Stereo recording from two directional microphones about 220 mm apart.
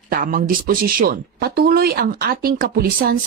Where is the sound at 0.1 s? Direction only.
40° right (ahead or behind).